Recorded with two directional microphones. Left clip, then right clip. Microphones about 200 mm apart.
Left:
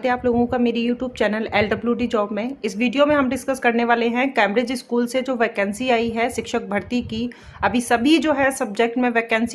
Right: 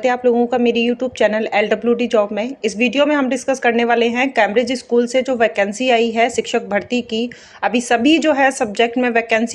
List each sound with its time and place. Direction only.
0.0 s speech: 5° right (ahead or behind)